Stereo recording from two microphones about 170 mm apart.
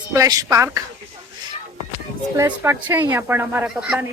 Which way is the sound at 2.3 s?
15° right (ahead or behind).